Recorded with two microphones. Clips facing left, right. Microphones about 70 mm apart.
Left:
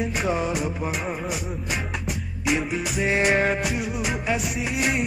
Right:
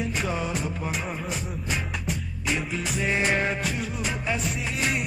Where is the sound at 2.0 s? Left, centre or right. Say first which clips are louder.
Left 6 dB; centre.